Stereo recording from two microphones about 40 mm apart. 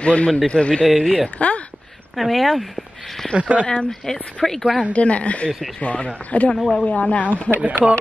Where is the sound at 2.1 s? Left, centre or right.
Centre.